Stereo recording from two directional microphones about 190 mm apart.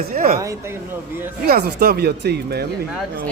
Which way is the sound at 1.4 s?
55° right (ahead or behind).